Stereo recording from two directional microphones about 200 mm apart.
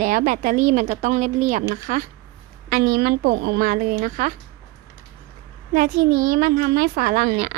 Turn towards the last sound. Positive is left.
turn(degrees=-40)  # may be behind; listen again after turning